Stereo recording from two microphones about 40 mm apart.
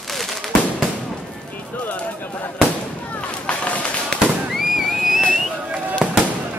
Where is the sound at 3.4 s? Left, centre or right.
Left.